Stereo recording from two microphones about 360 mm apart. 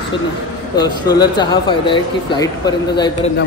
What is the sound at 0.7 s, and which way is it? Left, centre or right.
Speech, centre.